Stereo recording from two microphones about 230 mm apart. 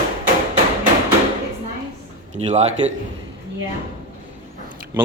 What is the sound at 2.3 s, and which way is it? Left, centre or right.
Speech, right.